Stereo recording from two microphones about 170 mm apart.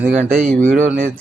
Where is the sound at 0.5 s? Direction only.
10° left (ahead or behind).